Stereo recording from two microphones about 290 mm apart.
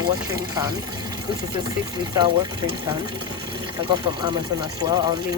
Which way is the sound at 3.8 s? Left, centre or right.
Centre.